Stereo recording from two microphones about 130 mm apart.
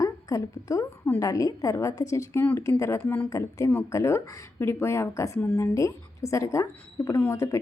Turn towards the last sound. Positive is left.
turn(degrees=20)  # may be behind; listen again after turning